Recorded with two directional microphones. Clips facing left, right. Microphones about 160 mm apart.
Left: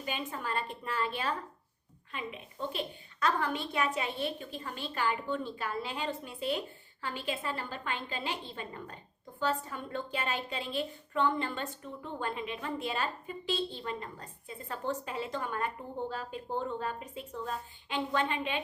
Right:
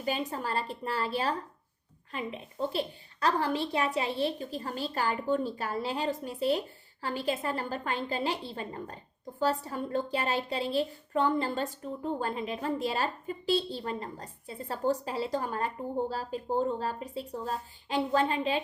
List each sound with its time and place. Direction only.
0.0 s a woman's voice: 40° right (ahead or behind)